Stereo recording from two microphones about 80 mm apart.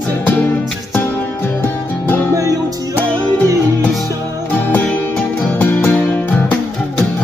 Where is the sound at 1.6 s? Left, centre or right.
Left.